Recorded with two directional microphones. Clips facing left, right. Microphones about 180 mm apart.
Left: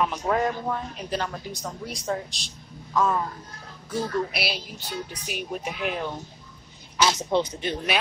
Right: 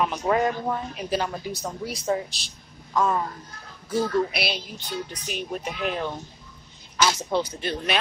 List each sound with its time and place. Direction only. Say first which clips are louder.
0.0 s a woman's voice: right 2 dB; centre (ahead or behind)
7.1 s speech: left 3 dB; 20° left (ahead or behind)